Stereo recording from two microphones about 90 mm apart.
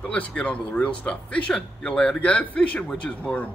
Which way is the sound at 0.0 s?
15° left (ahead or behind).